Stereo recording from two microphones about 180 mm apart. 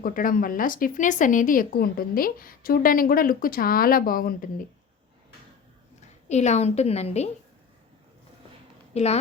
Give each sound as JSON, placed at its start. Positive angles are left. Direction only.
{"t": 0.0, "sound": "speech", "side_deg": 50}
{"t": 6.0, "sound": "a woman's voice", "side_deg": 40}
{"t": 8.9, "sound": "speech", "side_deg": 35}